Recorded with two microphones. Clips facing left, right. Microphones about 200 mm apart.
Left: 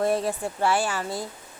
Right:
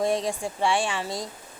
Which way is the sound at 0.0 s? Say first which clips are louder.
Left 1 dB; 5° left (ahead or behind).